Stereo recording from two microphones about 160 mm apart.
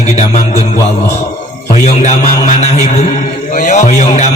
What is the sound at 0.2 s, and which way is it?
Music, 45° left (ahead or behind).